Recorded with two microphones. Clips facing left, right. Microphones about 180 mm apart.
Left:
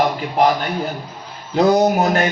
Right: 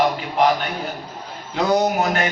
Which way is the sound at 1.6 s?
40° left (ahead or behind).